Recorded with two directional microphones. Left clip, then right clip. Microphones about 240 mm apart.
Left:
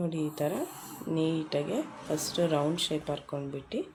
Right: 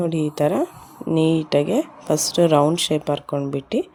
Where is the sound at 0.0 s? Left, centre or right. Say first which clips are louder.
Right 11 dB; right.